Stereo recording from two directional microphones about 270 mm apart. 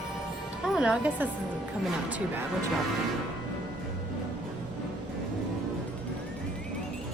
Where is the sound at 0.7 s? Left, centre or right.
Centre.